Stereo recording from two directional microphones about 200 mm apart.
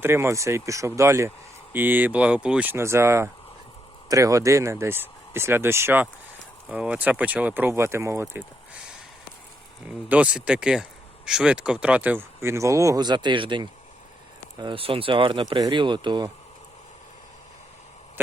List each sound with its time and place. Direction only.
0.0 s speech: 10° right (ahead or behind)
10.1 s speech: 5° right (ahead or behind); by 16.3 s 20° right (ahead or behind)